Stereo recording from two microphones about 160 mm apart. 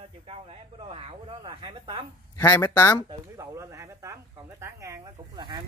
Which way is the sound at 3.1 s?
20° right (ahead or behind).